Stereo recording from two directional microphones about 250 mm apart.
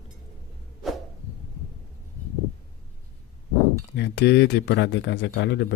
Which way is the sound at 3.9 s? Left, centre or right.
Left.